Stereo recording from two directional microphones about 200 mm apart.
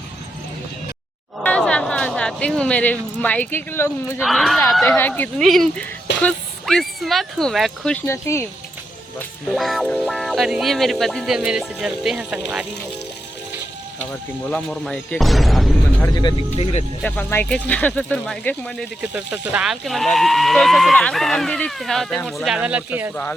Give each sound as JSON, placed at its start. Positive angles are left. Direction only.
{"t": 1.5, "sound": "speech", "side_deg": 5}
{"t": 4.3, "sound": "speech", "side_deg": 0}
{"t": 8.0, "sound": "speech", "side_deg": 15}
{"t": 9.1, "sound": "speech", "side_deg": 0}
{"t": 14.1, "sound": "speech", "side_deg": 5}
{"t": 16.1, "sound": "speech", "side_deg": 20}
{"t": 17.0, "sound": "speech", "side_deg": 5}
{"t": 19.0, "sound": "speech", "side_deg": -5}